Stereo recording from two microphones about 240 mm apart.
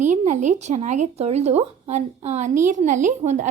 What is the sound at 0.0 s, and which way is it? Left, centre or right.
Speech, right.